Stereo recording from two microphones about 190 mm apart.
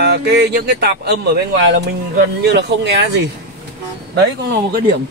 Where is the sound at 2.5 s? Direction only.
65° right (ahead or behind).